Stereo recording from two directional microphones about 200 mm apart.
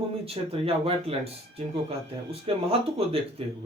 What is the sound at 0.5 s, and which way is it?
Speech, 30° right (ahead or behind).